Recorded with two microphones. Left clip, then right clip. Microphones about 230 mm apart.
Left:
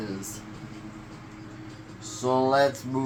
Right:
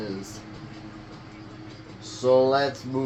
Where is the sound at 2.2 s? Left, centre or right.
Left.